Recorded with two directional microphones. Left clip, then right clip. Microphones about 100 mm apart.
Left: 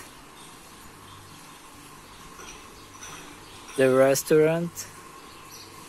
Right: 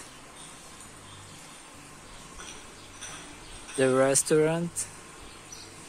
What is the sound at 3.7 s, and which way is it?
Speech, 10° left (ahead or behind).